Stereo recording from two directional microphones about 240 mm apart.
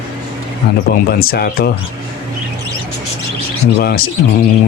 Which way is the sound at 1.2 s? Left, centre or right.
Left.